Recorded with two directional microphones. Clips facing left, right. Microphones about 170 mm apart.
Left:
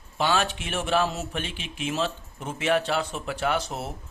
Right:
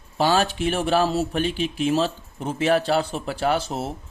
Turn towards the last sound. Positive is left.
turn(degrees=-30)  # may be behind; listen again after turning